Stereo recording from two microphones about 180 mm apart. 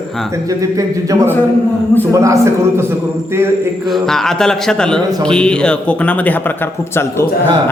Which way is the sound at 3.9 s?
Centre (ahead or behind).